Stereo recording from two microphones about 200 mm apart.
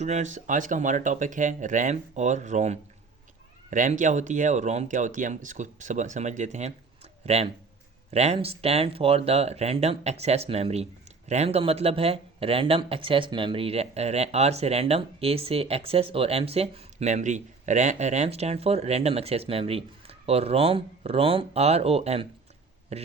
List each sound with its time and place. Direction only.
0.0 s speech: 35° right (ahead or behind)